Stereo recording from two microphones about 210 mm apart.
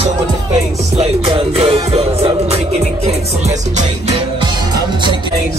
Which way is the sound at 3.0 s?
30° right (ahead or behind).